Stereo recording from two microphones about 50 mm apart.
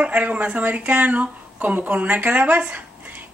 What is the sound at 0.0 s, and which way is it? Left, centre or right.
Speech, right.